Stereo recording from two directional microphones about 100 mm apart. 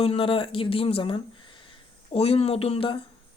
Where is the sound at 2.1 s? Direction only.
80° left.